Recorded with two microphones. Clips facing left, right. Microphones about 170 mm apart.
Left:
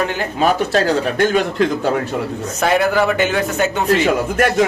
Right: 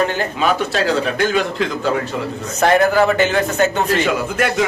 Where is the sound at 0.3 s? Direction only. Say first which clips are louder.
Left 4 dB; 45° left (ahead or behind).